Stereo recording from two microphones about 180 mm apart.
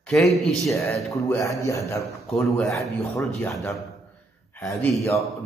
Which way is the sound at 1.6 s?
15° left (ahead or behind).